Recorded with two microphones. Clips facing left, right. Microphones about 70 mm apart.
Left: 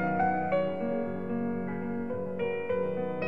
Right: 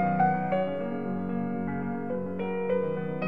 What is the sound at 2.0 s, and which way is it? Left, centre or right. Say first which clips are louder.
Music: even; centre.